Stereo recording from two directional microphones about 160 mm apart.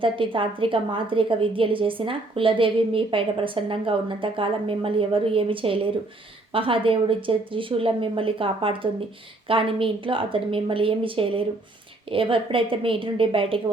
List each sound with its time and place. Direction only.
0.0 s a woman's voice: 35° right (ahead or behind)